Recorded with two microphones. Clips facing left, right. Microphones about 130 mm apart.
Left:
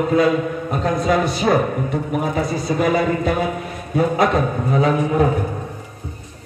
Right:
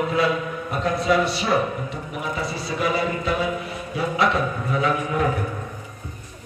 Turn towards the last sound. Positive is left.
turn(degrees=35)  # may be behind; listen again after turning